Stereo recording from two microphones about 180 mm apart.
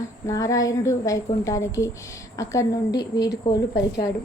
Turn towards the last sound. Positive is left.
turn(degrees=20)  # may be behind; listen again after turning